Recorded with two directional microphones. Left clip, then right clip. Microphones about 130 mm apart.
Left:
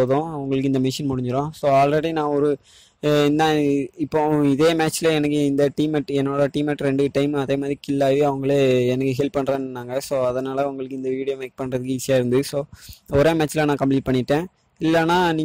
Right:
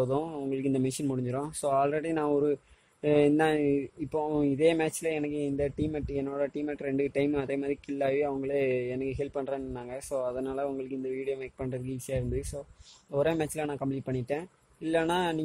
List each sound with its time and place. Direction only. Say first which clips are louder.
0.0 s speech: left 9 dB; 30° left (ahead or behind)